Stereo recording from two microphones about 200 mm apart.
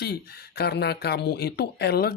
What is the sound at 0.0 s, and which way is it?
Speech, 55° left (ahead or behind).